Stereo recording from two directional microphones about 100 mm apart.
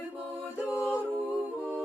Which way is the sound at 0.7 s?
25° left (ahead or behind).